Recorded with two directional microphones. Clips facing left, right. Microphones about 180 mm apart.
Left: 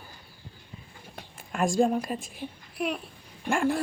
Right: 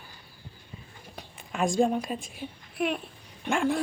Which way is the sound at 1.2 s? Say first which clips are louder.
Left 1 dB; centre (ahead or behind).